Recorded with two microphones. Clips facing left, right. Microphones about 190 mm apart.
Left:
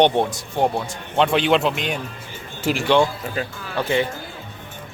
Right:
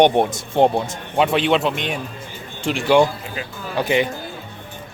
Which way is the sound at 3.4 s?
40° left (ahead or behind).